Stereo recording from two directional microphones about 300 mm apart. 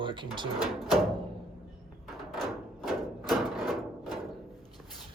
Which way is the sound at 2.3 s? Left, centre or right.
Centre.